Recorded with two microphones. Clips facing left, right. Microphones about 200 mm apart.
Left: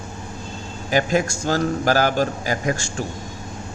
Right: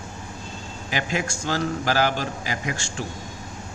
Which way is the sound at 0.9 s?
45° left (ahead or behind).